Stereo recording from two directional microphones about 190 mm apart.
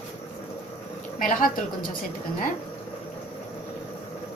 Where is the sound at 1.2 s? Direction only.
45° left (ahead or behind).